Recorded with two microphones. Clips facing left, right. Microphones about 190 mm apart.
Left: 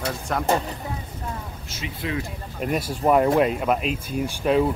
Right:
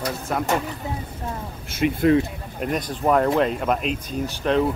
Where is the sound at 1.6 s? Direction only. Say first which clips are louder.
Right 14 dB; 55° right (ahead or behind).